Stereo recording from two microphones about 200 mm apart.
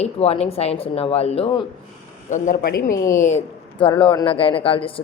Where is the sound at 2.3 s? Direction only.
40° left (ahead or behind).